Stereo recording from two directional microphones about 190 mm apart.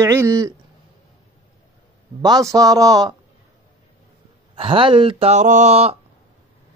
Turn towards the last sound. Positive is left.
turn(degrees=-35)  # may be behind; listen again after turning